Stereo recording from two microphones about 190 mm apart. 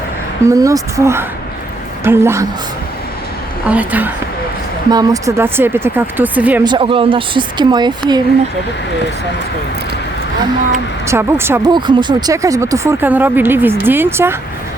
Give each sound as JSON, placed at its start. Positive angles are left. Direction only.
{"t": 0.4, "sound": "speech", "side_deg": -20}
{"t": 3.7, "sound": "speech", "side_deg": -10}
{"t": 4.9, "sound": "speech", "side_deg": -20}
{"t": 6.7, "sound": "speech", "side_deg": -25}
{"t": 11.0, "sound": "speech", "side_deg": -15}